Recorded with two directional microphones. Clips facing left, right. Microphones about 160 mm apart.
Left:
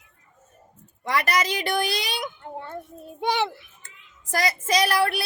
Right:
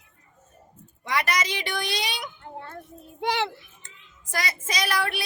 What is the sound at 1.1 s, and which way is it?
A woman's voice, 40° left (ahead or behind).